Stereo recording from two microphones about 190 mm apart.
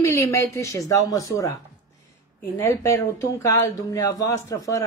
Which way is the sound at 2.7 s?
15° left (ahead or behind).